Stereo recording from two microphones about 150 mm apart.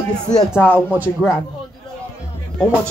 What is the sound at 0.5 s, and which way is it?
Speech, 10° left (ahead or behind).